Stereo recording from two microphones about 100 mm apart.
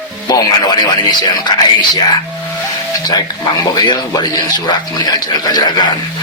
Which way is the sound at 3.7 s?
45° left (ahead or behind).